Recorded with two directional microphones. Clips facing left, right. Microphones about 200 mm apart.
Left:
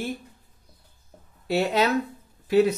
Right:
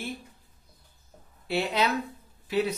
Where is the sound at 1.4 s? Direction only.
45° left (ahead or behind).